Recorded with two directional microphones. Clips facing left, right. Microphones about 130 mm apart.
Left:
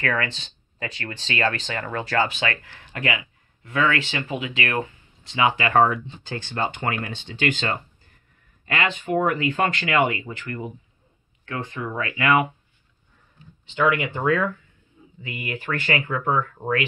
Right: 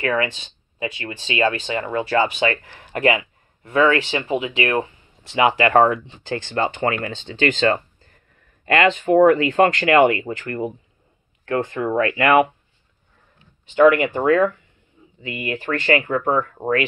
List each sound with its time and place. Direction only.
0.0 s speech: 15° right (ahead or behind)
2.4 s speech: 25° right (ahead or behind)
5.3 s speech: 40° right (ahead or behind)
13.8 s speech: 45° right (ahead or behind)
15.2 s speech: 25° right (ahead or behind)
16.1 s speech: 45° right (ahead or behind)